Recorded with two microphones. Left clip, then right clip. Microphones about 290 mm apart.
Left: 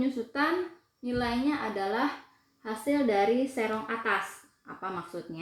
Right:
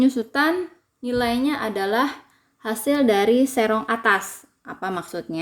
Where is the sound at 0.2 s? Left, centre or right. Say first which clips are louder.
Right 8 dB; right.